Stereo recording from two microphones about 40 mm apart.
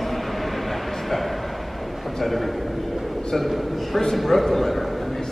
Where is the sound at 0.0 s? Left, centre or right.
Centre.